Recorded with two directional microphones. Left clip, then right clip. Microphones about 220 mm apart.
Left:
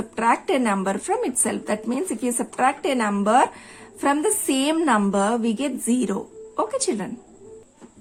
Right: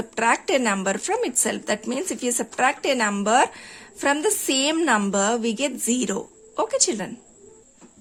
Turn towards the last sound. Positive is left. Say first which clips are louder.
# right 1 dB
turn(degrees=-20)  # may be behind; listen again after turning